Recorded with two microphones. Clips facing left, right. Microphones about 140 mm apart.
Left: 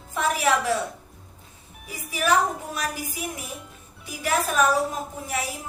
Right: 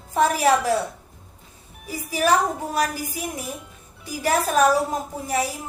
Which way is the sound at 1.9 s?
35° right (ahead or behind).